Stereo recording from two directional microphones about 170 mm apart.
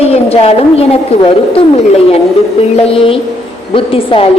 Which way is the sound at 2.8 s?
35° left (ahead or behind).